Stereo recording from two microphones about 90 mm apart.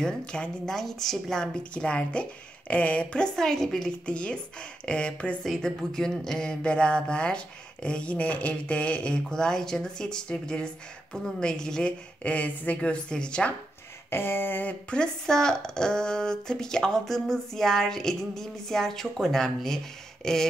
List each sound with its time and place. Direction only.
0.0 s speech: 10° left (ahead or behind)
5.4 s speech: centre (ahead or behind)
14.1 s speech: 25° left (ahead or behind); by 19.8 s 5° left (ahead or behind)
20.2 s a sound: 5° left (ahead or behind)